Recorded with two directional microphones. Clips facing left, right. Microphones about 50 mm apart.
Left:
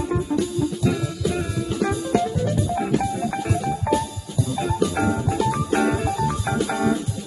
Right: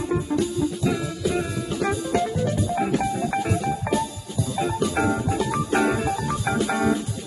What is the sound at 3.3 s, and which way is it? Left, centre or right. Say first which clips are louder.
Music: even; centre.